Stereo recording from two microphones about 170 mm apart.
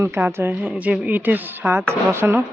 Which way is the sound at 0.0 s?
15° right (ahead or behind).